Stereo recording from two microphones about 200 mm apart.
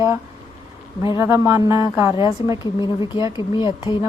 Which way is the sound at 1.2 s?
15° right (ahead or behind).